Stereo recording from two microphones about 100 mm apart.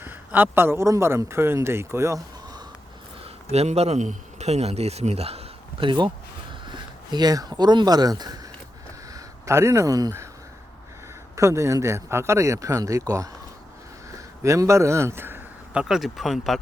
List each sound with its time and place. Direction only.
0.3 s a man's voice: 15° right (ahead or behind)
3.5 s a man's voice: 90° right
6.7 s speech: 45° right (ahead or behind)
9.1 s speech: 30° right (ahead or behind)
11.3 s a man's voice: 30° right (ahead or behind)
15.7 s speech: 5° right (ahead or behind)